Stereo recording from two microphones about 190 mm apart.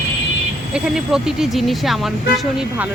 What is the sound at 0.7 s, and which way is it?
Speech, 5° right (ahead or behind).